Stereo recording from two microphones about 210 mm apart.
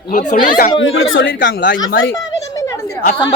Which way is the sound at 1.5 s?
45° left (ahead or behind).